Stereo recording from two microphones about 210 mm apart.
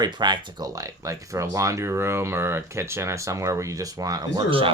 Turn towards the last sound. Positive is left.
turn(degrees=-25)  # may be behind; listen again after turning